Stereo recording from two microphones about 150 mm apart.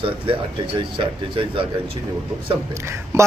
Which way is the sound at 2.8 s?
20° right (ahead or behind).